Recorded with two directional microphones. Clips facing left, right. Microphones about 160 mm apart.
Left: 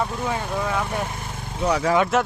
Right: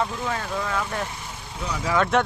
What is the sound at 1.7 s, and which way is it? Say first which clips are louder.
Speech: left 8 dB; 60° left (ahead or behind).